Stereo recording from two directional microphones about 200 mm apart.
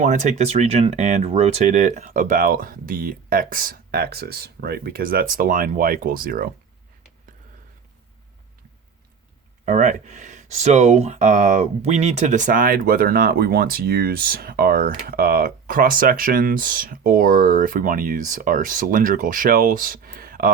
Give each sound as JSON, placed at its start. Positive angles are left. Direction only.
{"t": 0.0, "sound": "speech", "side_deg": -40}
{"t": 9.6, "sound": "speech", "side_deg": -40}